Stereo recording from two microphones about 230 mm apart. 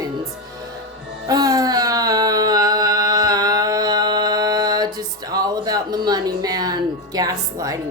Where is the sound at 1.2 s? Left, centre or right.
Centre.